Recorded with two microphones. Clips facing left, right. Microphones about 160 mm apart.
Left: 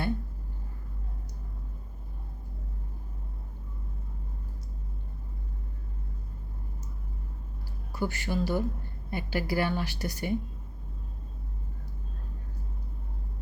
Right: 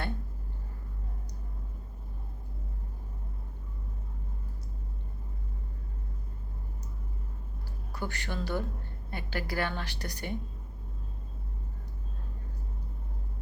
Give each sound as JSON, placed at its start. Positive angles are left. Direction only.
{"t": 7.9, "sound": "a woman's voice", "side_deg": 5}